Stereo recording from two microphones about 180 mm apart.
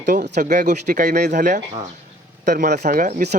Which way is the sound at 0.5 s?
45° right (ahead or behind).